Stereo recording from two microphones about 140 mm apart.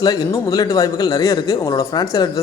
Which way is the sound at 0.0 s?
30° left (ahead or behind).